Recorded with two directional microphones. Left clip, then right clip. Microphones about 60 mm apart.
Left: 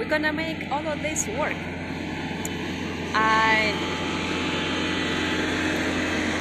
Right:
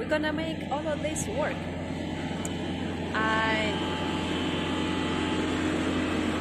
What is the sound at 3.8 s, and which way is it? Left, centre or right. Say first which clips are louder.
Vehicle: left 3 dB; centre.